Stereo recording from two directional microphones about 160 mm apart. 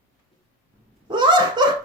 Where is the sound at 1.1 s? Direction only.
30° right (ahead or behind).